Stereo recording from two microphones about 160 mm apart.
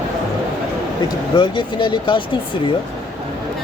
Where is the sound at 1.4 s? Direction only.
30° left (ahead or behind).